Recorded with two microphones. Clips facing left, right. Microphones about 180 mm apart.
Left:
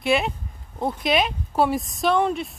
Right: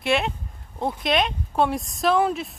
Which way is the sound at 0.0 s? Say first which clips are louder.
Left 1 dB; centre (ahead or behind).